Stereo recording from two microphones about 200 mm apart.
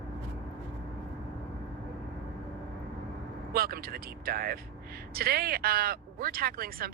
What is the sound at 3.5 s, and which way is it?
Speech, 50° right (ahead or behind).